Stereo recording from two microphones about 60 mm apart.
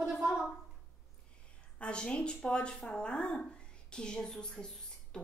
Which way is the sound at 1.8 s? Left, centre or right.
Centre.